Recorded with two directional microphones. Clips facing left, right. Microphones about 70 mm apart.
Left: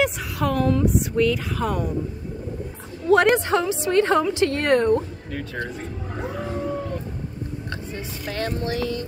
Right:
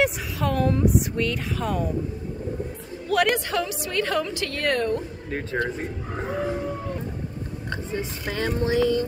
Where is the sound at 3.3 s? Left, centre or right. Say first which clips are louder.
Left 5 dB; left.